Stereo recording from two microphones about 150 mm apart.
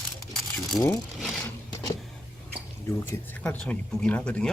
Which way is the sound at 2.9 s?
20° left (ahead or behind).